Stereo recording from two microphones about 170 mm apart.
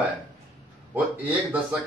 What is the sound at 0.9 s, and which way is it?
Speech, 10° right (ahead or behind).